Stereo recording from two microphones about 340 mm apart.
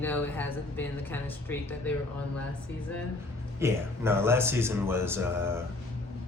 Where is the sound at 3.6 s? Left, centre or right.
Centre.